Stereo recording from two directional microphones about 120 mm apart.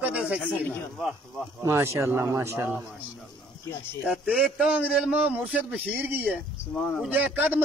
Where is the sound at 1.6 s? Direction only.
25° right (ahead or behind).